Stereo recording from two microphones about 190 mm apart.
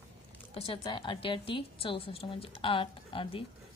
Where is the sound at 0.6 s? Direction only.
25° left (ahead or behind).